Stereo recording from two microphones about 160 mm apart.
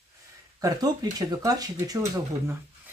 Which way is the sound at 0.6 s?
25° right (ahead or behind).